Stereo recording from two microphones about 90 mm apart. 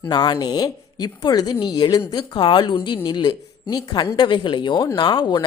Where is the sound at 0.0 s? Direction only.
55° left (ahead or behind).